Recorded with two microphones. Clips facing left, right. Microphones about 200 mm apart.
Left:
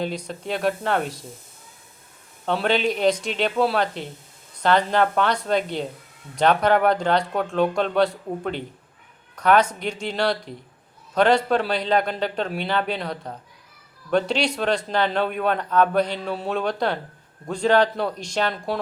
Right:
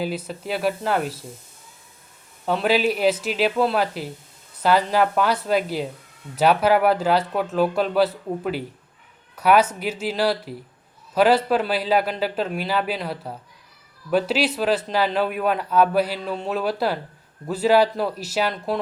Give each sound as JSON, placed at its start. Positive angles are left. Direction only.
{"t": 0.0, "sound": "a man's voice", "side_deg": -5}
{"t": 2.5, "sound": "a man's voice", "side_deg": -5}